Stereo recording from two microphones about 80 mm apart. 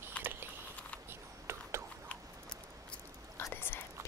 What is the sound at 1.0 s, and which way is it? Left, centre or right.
Camera, right.